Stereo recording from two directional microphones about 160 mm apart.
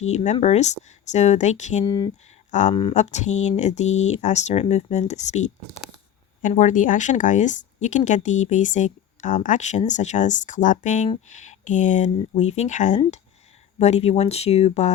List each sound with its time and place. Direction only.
0.0 s speech: 45° left (ahead or behind)
1.8 s speech: 25° left (ahead or behind)
2.5 s speech: 50° left (ahead or behind)